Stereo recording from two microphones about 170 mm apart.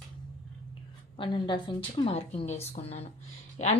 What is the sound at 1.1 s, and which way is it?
A woman's voice, 30° left (ahead or behind).